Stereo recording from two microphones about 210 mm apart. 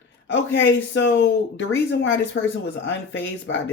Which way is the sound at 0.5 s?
65° left (ahead or behind).